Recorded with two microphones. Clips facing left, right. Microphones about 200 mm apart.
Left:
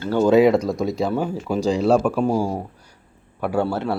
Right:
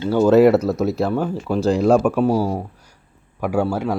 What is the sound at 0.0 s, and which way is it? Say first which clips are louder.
A man's voice: right 2 dB; 10° right (ahead or behind).